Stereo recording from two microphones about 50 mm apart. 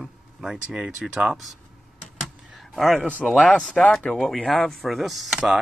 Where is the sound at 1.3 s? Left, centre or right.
Centre.